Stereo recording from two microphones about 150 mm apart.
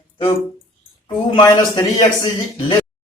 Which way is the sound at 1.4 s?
30° left (ahead or behind).